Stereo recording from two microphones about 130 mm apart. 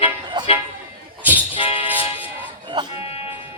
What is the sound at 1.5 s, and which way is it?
Music, 45° left (ahead or behind).